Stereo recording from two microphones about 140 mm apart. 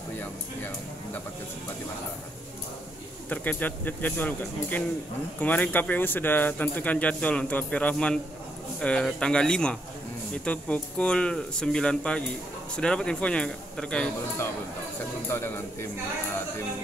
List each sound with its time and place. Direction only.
3.3 s speech: 10° left (ahead or behind)
15.2 s speech: 15° left (ahead or behind)